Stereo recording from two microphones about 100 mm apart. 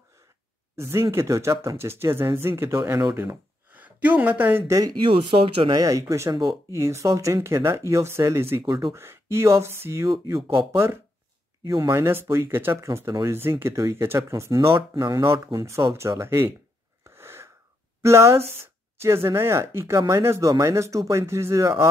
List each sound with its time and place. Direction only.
0.7 s speech: 25° right (ahead or behind)
4.6 s speech: 35° right (ahead or behind)
5.0 s speech: 65° right (ahead or behind)
5.8 s speech: 35° right (ahead or behind)
15.0 s speech: 45° right (ahead or behind)
15.4 s speech: 35° right (ahead or behind)
17.0 s wheeze: 25° right (ahead or behind)
18.0 s speech: 30° right (ahead or behind)